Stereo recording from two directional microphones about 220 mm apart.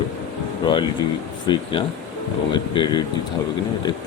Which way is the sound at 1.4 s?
20° left (ahead or behind).